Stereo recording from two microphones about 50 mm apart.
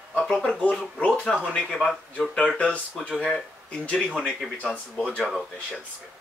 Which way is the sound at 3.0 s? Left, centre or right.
Centre.